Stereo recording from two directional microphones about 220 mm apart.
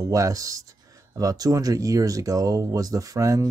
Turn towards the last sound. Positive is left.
turn(degrees=-15)  # may be behind; listen again after turning